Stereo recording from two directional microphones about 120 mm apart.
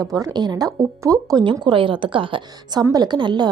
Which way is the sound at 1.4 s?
40° right (ahead or behind).